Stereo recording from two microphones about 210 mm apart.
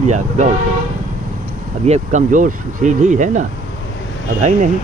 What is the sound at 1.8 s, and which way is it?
Speech, 35° right (ahead or behind).